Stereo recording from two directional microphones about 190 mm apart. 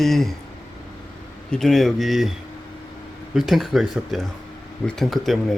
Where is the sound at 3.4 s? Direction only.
Centre (ahead or behind).